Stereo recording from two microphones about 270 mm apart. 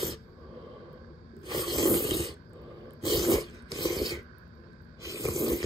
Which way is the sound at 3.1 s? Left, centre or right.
Centre.